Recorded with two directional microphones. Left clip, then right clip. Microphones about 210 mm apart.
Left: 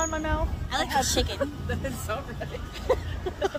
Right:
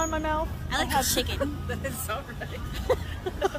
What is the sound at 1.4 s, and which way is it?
Speech, 5° left (ahead or behind).